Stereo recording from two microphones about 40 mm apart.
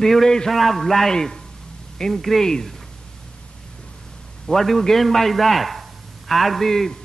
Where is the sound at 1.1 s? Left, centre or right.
Centre.